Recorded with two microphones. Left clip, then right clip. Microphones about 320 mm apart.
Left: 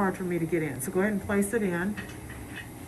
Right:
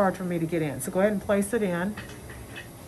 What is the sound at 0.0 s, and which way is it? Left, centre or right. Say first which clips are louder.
Speech: right 3 dB; right.